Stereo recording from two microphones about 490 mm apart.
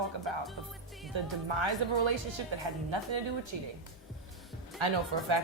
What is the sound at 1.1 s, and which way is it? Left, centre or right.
A woman's voice, right.